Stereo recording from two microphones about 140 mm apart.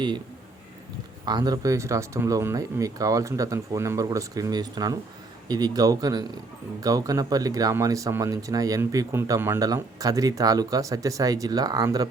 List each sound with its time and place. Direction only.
1.2 s speech: 30° right (ahead or behind)